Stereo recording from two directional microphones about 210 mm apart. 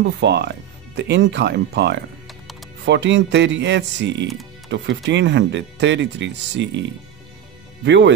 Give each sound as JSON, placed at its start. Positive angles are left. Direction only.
{"t": 0.2, "sound": "speech", "side_deg": -55}
{"t": 7.8, "sound": "speech", "side_deg": -55}